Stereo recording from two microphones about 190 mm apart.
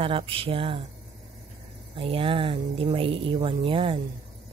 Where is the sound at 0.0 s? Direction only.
30° right (ahead or behind).